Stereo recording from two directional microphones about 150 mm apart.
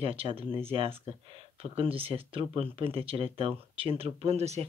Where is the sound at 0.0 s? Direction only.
40° right (ahead or behind).